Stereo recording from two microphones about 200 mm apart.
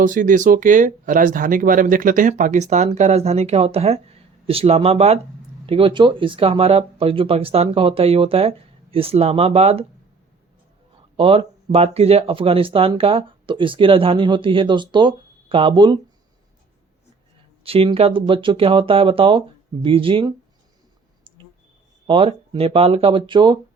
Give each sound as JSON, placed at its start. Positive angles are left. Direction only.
{"t": 0.0, "sound": "speech", "side_deg": -40}
{"t": 11.2, "sound": "speech", "side_deg": -30}
{"t": 17.6, "sound": "speech", "side_deg": -30}
{"t": 22.0, "sound": "speech", "side_deg": -25}